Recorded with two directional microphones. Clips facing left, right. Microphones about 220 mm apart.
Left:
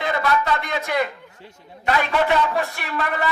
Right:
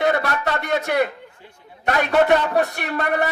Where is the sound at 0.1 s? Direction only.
60° right (ahead or behind).